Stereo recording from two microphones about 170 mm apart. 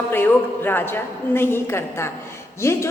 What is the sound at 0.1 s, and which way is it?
A woman's voice, 10° left (ahead or behind).